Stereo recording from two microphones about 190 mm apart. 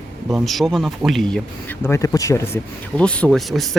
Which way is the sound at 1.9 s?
15° left (ahead or behind).